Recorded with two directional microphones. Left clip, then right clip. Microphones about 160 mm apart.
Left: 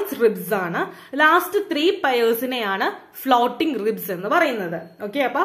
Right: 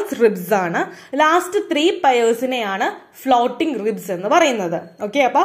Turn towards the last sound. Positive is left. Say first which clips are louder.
# right 6 dB
turn(degrees=-15)  # may be behind; listen again after turning